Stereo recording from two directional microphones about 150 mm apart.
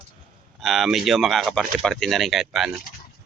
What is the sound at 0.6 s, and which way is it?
Speech, centre (ahead or behind).